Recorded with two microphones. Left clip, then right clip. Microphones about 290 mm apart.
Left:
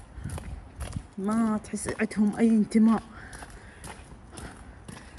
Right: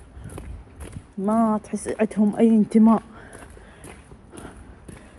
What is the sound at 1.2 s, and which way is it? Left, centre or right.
Speech, centre.